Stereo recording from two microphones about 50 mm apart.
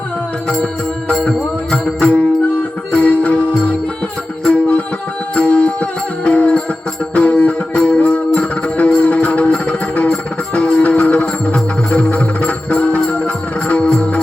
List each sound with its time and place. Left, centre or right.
0.4 s music: centre
1.7 s music: left
5.3 s music: left